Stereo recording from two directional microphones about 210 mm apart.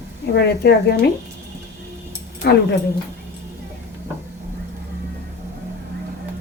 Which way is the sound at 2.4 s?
50° left (ahead or behind).